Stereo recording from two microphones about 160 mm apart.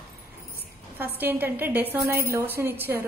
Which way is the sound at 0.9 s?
15° right (ahead or behind).